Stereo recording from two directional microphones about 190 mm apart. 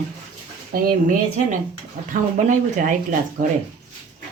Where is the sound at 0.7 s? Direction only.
50° right (ahead or behind).